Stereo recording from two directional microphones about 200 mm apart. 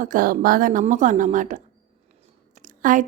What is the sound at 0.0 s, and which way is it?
A woman's voice, 45° right (ahead or behind).